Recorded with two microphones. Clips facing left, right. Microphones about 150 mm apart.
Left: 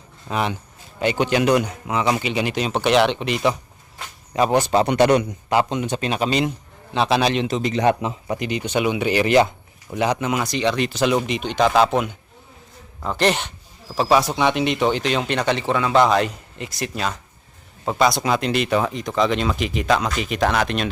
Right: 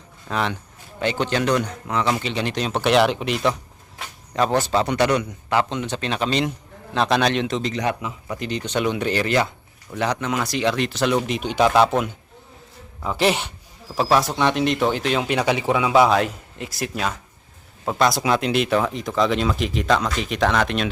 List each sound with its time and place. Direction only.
0.3 s speech: 10° left (ahead or behind)
4.4 s speech: 15° left (ahead or behind)
7.7 s a man's voice: 25° left (ahead or behind)
8.4 s speech: 10° left (ahead or behind)